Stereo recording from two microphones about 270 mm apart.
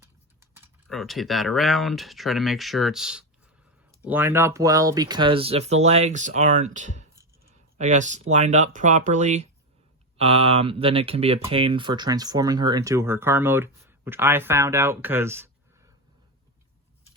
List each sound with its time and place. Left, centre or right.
0.5 s speech: centre